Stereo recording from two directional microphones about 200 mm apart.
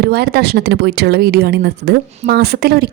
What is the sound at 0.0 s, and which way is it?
Speech, 55° right (ahead or behind).